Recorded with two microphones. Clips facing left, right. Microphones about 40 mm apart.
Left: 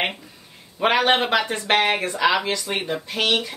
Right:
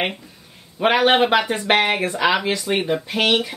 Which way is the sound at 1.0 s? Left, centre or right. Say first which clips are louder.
Right 3 dB; centre.